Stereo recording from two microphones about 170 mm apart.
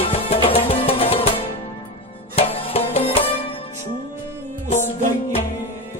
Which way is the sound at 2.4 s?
35° left (ahead or behind).